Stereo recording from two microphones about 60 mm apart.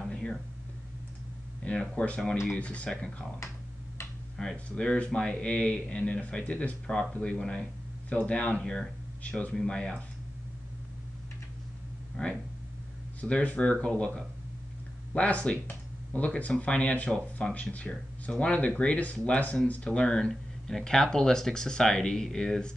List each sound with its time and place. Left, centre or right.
1.6 s speech: centre
4.4 s speech: centre
12.2 s speech: centre